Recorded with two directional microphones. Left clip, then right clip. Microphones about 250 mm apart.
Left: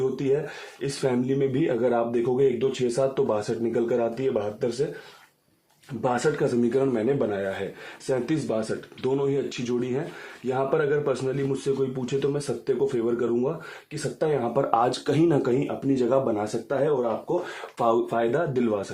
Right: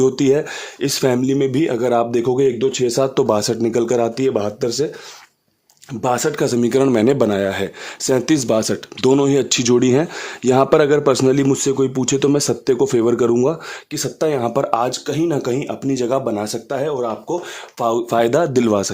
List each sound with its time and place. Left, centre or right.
0.0 s speech: right
6.0 s speech: right
17.7 s speech: right
18.1 s speech: right